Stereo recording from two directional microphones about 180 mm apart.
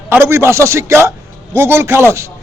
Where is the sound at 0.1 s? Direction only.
15° right (ahead or behind).